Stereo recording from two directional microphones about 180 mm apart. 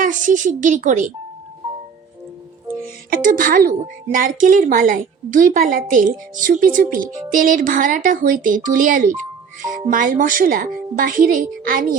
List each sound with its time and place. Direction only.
0.0 s a woman's voice: 45° right (ahead or behind)
3.1 s a woman's voice: 50° right (ahead or behind)